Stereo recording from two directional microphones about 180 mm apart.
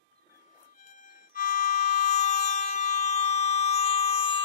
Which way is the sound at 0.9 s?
50° left (ahead or behind).